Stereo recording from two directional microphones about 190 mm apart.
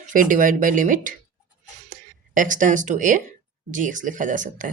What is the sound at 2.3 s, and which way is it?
Speech, 45° right (ahead or behind).